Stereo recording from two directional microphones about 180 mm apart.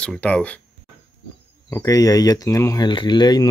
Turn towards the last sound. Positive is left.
turn(degrees=25)  # may be behind; listen again after turning